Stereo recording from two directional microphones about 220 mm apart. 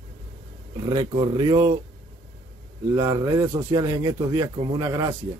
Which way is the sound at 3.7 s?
20° right (ahead or behind).